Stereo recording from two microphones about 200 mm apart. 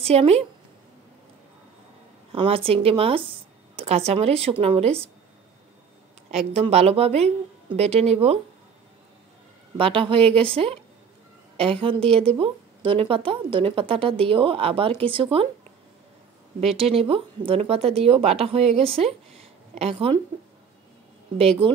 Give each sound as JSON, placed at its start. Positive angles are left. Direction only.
{"t": 0.0, "sound": "a woman's voice", "side_deg": -30}
{"t": 2.3, "sound": "speech", "side_deg": -30}
{"t": 6.3, "sound": "a woman's voice", "side_deg": -30}
{"t": 9.8, "sound": "a woman's voice", "side_deg": -25}
{"t": 16.9, "sound": "a woman's voice", "side_deg": -30}
{"t": 21.6, "sound": "a woman's voice", "side_deg": -25}